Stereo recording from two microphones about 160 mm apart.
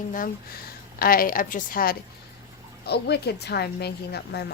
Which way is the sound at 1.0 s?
65° left (ahead or behind).